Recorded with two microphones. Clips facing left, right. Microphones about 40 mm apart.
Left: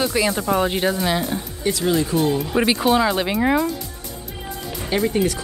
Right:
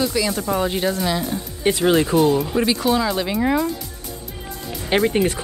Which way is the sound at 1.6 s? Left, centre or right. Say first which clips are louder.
Right 4 dB; right.